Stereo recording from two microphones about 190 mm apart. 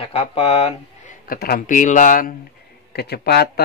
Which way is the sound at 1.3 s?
50° left (ahead or behind).